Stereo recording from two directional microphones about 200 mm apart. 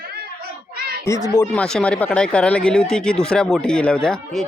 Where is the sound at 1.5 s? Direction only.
5° left (ahead or behind).